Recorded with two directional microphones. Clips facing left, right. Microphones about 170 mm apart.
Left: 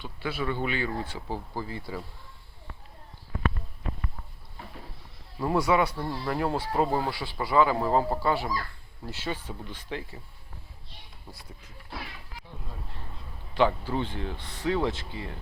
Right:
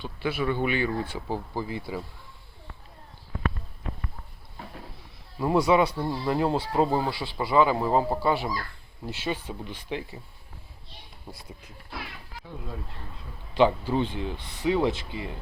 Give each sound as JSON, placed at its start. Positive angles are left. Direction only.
{"t": 0.0, "sound": "speech", "side_deg": -20}
{"t": 5.4, "sound": "speech", "side_deg": -15}
{"t": 13.5, "sound": "speech", "side_deg": -20}